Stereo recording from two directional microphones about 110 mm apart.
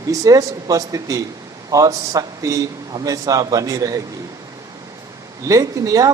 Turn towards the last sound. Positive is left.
turn(degrees=-30)  # may be behind; listen again after turning